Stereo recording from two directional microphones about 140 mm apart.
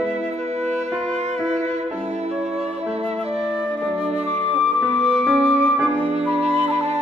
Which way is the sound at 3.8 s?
45° right (ahead or behind).